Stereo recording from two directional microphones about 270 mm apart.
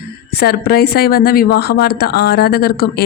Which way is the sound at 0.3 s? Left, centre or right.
Left.